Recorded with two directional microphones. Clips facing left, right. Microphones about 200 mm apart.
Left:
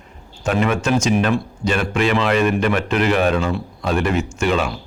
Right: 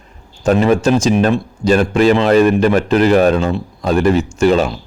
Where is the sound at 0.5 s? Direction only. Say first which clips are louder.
Right 6 dB; 35° right (ahead or behind).